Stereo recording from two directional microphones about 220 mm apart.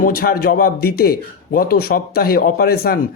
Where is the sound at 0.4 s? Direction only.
40° left (ahead or behind).